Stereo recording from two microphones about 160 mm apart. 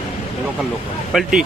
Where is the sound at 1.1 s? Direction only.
5° right (ahead or behind).